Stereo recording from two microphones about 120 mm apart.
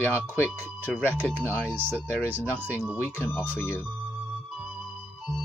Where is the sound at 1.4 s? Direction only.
20° left (ahead or behind).